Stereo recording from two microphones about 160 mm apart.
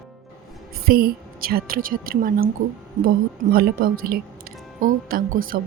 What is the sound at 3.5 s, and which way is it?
A woman's voice, 65° right (ahead or behind).